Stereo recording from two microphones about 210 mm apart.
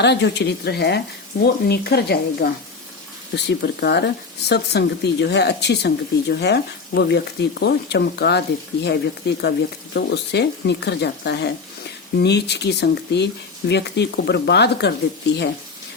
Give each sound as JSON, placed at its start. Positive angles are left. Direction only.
{"t": 0.0, "sound": "speech", "side_deg": 55}